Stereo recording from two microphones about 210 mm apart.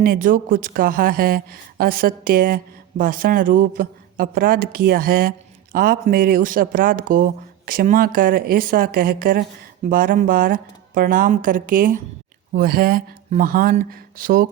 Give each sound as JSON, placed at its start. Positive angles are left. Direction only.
{"t": 0.0, "sound": "speech", "side_deg": -40}